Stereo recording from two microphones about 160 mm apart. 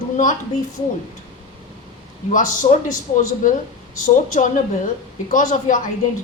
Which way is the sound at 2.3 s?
50° left (ahead or behind).